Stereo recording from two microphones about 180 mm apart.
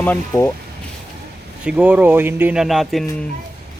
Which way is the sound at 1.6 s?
5° right (ahead or behind).